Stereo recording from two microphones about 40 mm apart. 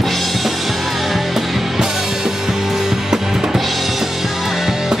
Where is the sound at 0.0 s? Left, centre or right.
Centre.